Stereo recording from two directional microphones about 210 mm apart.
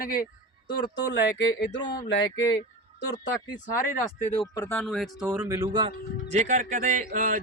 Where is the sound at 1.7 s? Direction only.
20° left (ahead or behind).